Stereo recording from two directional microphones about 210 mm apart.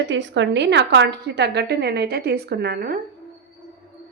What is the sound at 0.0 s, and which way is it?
A woman's voice, 60° right (ahead or behind).